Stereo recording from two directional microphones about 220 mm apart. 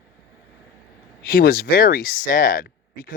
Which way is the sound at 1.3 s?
40° left (ahead or behind).